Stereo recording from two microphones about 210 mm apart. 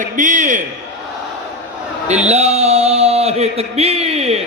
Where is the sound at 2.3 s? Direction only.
30° right (ahead or behind).